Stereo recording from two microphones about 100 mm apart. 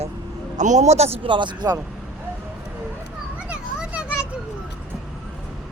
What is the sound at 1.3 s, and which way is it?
Speech, 50° right (ahead or behind).